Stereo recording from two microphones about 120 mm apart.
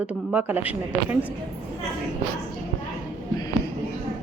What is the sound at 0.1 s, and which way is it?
Speech, 10° right (ahead or behind).